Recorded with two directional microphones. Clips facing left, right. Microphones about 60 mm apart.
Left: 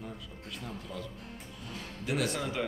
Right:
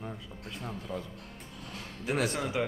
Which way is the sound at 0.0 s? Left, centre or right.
Right.